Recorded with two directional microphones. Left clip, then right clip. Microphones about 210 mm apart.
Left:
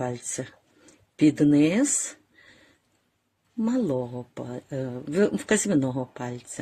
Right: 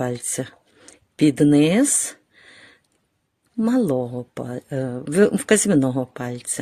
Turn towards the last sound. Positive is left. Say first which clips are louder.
# right 6 dB
turn(degrees=-55)  # may be behind; listen again after turning